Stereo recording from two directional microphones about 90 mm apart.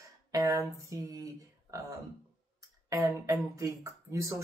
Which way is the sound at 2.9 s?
35° right (ahead or behind).